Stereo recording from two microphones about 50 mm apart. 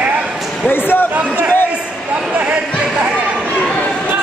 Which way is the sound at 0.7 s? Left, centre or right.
Left.